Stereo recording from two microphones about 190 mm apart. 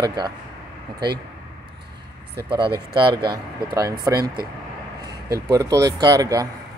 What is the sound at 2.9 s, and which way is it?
Speech, 25° right (ahead or behind).